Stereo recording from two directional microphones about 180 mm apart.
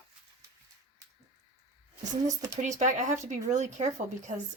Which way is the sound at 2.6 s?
40° right (ahead or behind).